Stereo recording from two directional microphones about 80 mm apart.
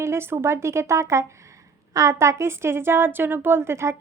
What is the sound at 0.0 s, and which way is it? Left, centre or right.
A woman's voice, right.